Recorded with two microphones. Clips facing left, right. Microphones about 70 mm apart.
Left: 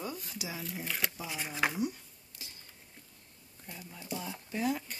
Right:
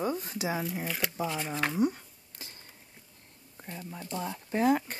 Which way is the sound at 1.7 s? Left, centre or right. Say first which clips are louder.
Right 7 dB; right.